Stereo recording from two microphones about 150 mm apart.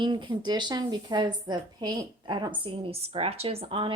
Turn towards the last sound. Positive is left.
turn(degrees=-35)  # may be behind; listen again after turning